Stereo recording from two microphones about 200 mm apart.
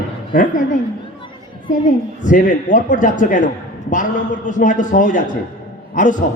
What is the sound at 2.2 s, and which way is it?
A man's voice, 40° left (ahead or behind).